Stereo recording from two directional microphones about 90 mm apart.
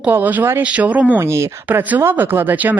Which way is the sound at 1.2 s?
30° right (ahead or behind).